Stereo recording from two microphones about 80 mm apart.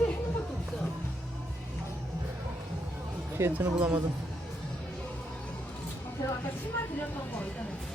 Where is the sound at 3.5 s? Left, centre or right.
Centre.